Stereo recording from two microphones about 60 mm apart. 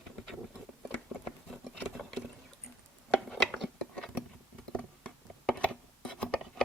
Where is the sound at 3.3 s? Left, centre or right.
Centre.